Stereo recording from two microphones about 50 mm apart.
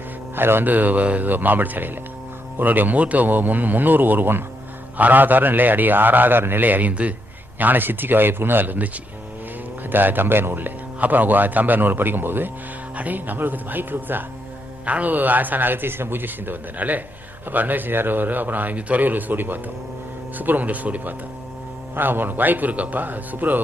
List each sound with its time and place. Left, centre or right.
0.3 s speech: right
0.7 s a man's voice: right
7.6 s a man's voice: right
9.9 s a man's voice: right
14.8 s a man's voice: right
21.9 s a man's voice: right